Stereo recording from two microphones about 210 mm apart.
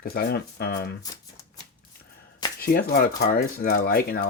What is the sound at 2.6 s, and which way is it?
Speech, 45° left (ahead or behind).